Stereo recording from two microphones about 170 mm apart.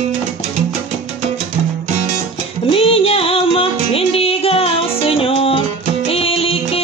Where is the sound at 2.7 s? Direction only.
35° left (ahead or behind).